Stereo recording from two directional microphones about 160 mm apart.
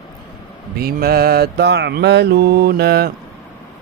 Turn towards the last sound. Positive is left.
turn(degrees=-80)